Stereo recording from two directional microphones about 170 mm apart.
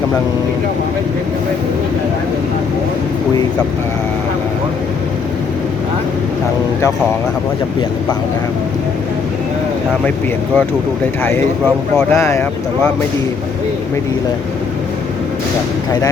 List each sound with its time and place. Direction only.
12.1 s speech: 20° left (ahead or behind)